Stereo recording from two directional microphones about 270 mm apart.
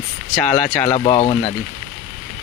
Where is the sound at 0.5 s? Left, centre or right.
Centre.